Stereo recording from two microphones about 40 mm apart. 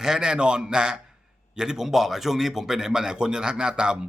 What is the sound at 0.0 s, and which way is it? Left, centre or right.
A man's voice, centre.